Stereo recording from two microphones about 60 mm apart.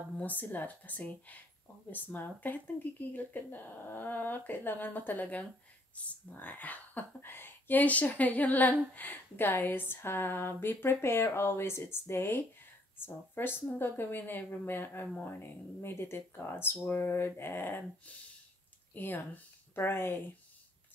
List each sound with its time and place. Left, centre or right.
0.2 s speech: left
18.9 s speech: left